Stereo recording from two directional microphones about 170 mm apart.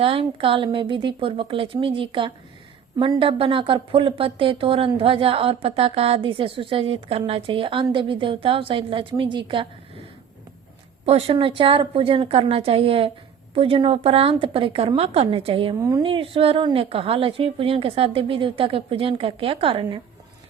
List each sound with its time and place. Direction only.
0.0 s a woman's voice: 30° right (ahead or behind)
11.0 s a woman's voice: 35° right (ahead or behind)
15.8 s speech: 20° right (ahead or behind)
16.0 s a woman's voice: 35° right (ahead or behind)